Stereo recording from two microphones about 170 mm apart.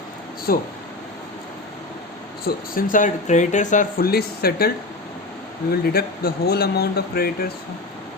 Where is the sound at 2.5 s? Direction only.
55° left (ahead or behind).